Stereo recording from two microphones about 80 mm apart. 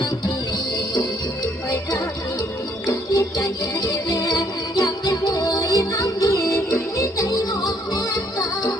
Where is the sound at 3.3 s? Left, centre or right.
Left.